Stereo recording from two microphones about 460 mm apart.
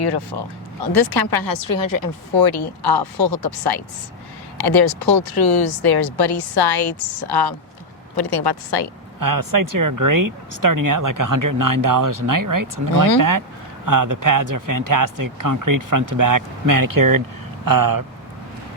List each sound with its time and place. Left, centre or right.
0.9 s speech: left
9.2 s speech: right